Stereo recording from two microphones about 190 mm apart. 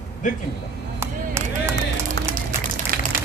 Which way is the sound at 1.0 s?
15° right (ahead or behind).